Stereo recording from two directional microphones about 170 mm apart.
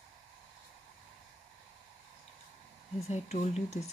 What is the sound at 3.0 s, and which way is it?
Speech, 40° left (ahead or behind).